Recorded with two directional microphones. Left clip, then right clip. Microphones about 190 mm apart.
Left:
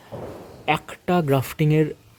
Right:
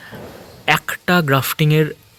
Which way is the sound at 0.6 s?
5° right (ahead or behind).